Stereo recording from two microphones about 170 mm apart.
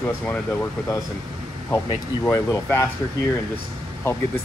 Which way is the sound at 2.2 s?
15° left (ahead or behind).